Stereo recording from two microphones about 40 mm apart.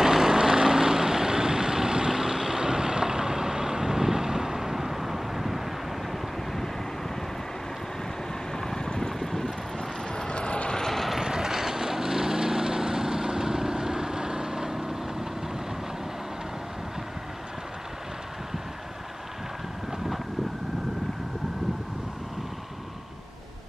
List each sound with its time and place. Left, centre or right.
0.0 s vehicle: centre
8.5 s boat: centre
9.2 s boat: centre
10.1 s vehicle: left
10.8 s vehicle: centre
11.1 s vehicle: centre